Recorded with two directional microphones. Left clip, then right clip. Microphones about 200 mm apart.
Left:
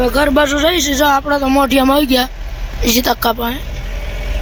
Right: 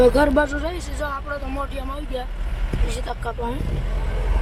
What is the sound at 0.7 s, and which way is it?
Speech, 40° left (ahead or behind).